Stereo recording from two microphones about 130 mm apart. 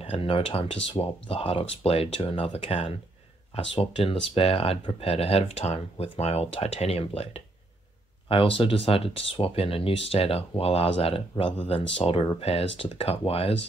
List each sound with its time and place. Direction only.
0.0 s speech: 45° left (ahead or behind)